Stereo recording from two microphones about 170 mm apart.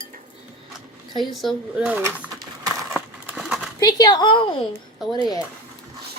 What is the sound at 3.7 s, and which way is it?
Speech, 20° left (ahead or behind).